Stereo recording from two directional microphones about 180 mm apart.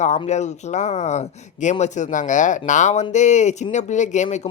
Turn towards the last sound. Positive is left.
turn(degrees=40)  # may be behind; listen again after turning